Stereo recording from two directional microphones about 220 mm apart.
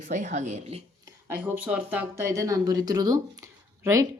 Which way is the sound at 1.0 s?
10° right (ahead or behind).